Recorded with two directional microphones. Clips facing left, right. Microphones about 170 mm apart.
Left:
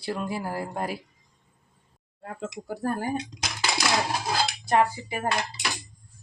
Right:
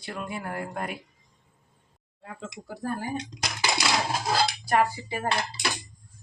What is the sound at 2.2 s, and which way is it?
Speech, 50° left (ahead or behind).